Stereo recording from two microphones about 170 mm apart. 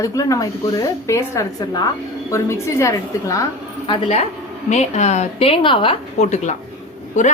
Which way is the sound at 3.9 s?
35° left (ahead or behind).